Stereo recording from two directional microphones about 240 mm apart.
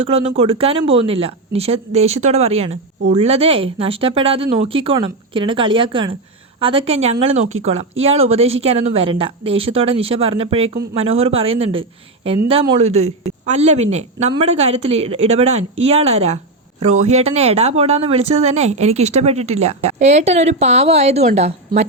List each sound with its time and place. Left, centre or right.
0.0 s speech: right